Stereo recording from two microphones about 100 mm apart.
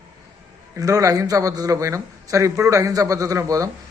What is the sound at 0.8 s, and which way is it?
A man's voice, 35° right (ahead or behind).